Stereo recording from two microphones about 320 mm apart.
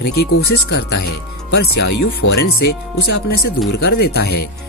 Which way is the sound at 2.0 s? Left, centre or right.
Left.